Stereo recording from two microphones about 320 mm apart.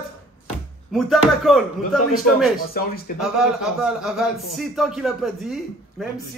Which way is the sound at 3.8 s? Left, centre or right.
Centre.